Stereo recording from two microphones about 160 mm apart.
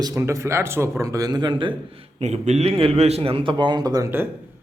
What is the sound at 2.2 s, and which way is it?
A man's voice, 45° right (ahead or behind).